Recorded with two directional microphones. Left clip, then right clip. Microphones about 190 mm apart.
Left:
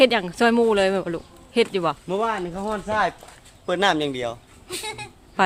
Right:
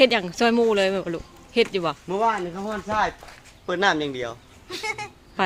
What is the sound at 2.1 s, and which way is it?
Speech, 65° left (ahead or behind).